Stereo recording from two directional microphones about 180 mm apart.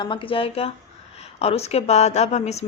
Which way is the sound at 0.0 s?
30° left (ahead or behind).